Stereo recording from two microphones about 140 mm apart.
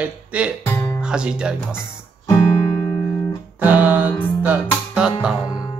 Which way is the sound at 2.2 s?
25° left (ahead or behind).